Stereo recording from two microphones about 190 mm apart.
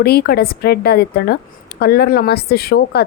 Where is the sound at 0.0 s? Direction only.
55° left (ahead or behind).